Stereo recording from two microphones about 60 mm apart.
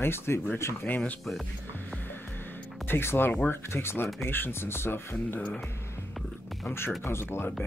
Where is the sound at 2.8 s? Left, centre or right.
Left.